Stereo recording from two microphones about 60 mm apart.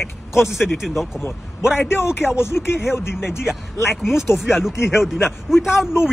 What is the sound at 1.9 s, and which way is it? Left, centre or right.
Speech, left.